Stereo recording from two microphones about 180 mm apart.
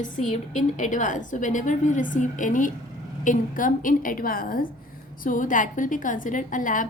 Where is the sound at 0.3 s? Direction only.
40° left (ahead or behind).